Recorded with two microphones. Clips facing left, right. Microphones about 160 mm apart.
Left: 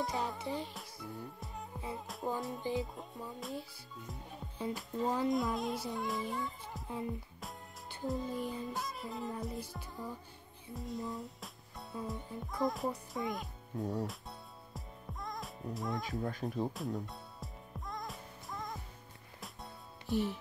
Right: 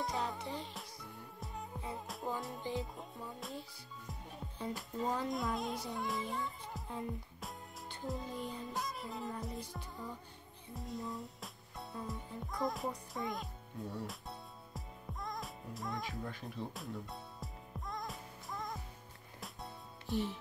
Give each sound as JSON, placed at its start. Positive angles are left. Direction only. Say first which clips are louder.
{"t": 0.0, "sound": "music", "louder": "left 2 dB", "side_deg": 0}
{"t": 13.7, "sound": "speech", "louder": "left 7 dB", "side_deg": 45}
{"t": 14.0, "sound": "music", "louder": "left 2 dB", "side_deg": 0}
{"t": 16.2, "sound": "speech", "louder": "left 7 dB", "side_deg": 40}
{"t": 16.7, "sound": "music", "louder": "left 5 dB", "side_deg": 0}